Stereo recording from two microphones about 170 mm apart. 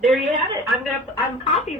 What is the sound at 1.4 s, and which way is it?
Speech, 40° left (ahead or behind).